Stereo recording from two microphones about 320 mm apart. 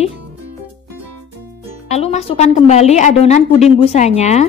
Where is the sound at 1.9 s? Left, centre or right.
Centre.